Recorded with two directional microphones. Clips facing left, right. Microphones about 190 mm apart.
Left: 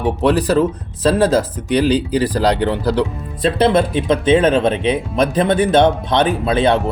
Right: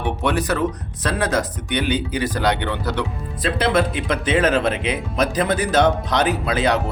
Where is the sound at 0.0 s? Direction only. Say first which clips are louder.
Left 6 dB; 35° left (ahead or behind).